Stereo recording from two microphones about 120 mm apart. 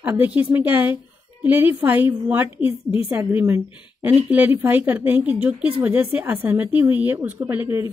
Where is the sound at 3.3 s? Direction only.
15° right (ahead or behind).